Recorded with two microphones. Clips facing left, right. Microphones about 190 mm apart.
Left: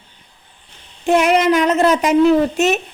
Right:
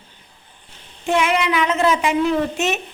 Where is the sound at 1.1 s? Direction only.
40° left (ahead or behind).